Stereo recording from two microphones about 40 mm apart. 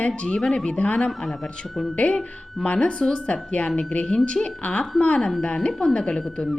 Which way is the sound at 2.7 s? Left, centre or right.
Centre.